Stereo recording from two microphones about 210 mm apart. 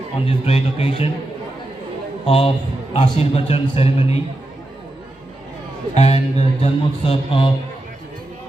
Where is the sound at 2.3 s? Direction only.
25° left (ahead or behind).